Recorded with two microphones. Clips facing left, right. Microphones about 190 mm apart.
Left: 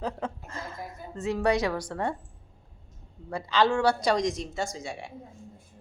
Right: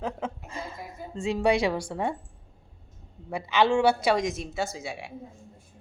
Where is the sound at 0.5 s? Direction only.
15° right (ahead or behind).